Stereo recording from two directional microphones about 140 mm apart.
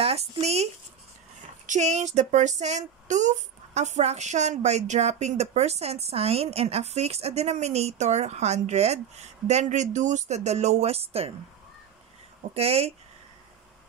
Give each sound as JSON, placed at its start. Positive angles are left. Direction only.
{"t": 0.0, "sound": "speech", "side_deg": -45}
{"t": 1.7, "sound": "speech", "side_deg": -55}
{"t": 12.5, "sound": "speech", "side_deg": -45}